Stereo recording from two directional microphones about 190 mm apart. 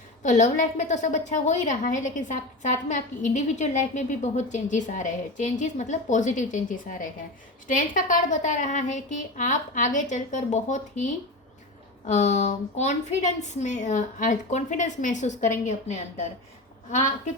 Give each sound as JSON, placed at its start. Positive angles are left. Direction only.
{"t": 0.2, "sound": "a woman's voice", "side_deg": 40}